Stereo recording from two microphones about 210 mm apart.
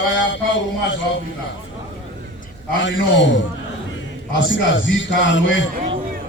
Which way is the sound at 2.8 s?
60° left (ahead or behind).